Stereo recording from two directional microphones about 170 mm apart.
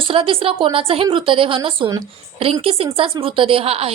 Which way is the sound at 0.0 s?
30° right (ahead or behind).